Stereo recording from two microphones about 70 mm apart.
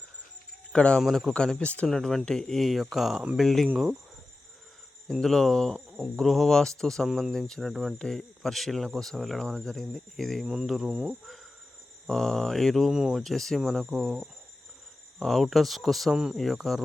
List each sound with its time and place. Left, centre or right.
0.7 s speech: centre
1.0 s speech: centre
1.3 s speech: centre
1.9 s speech: centre
5.2 s speech: centre
7.9 s speech: centre
10.4 s cricket: centre
12.0 s speech: centre
12.9 s cricket: centre
13.1 s speech: centre
13.8 s cricket: centre
15.2 s speech: centre
16.1 s cricket: centre
16.4 s speech: centre